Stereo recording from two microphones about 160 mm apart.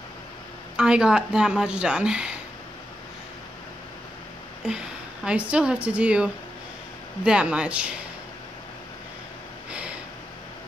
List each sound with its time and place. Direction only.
0.7 s speech: 5° right (ahead or behind)
4.6 s a woman's voice: 5° right (ahead or behind)
9.7 s a sound: 5° right (ahead or behind)